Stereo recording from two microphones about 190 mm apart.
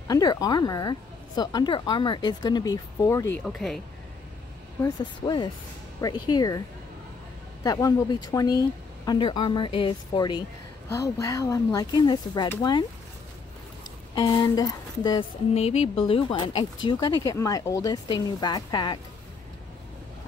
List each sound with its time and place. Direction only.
0.1 s speech: 20° left (ahead or behind)
3.4 s speech: centre (ahead or behind)
4.8 s speech: 20° left (ahead or behind)
7.6 s speech: 20° left (ahead or behind)
14.1 s speech: 20° left (ahead or behind)
15.5 s speech: 35° left (ahead or behind)